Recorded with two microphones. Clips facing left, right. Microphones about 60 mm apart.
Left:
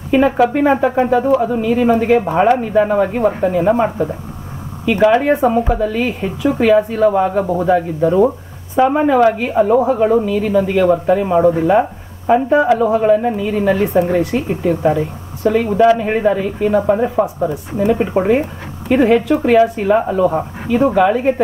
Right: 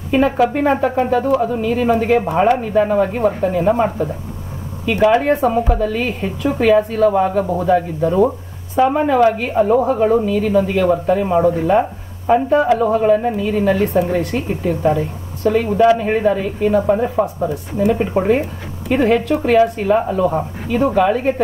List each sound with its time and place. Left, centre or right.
0.1 s a woman's voice: centre